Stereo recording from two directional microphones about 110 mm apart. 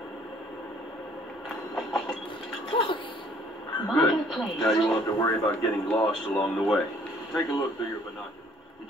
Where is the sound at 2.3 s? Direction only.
50° left (ahead or behind).